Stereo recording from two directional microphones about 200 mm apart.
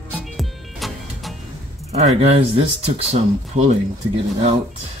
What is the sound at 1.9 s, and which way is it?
Speech, 30° right (ahead or behind).